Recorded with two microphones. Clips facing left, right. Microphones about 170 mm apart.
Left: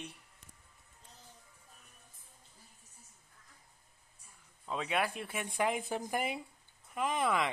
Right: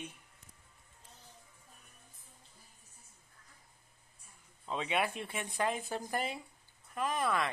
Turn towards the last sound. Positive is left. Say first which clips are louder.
# left 1 dB
turn(degrees=15)  # may be behind; listen again after turning